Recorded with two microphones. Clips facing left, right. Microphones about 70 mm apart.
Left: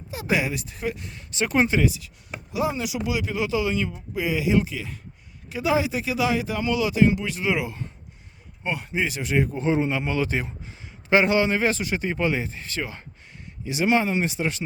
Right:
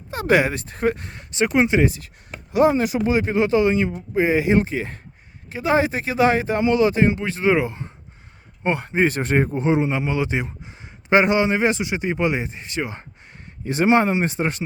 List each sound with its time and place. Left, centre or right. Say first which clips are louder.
0.1 s speech: right 7 dB; right
1.7 s a man's voice: right 5 dB; right
2.5 s speech: right 9 dB; right
6.6 s speech: right 2 dB; right
9.5 s a man's voice: right 3 dB; right
13.6 s speech: right 5 dB; right
14.1 s speech: right 3 dB; right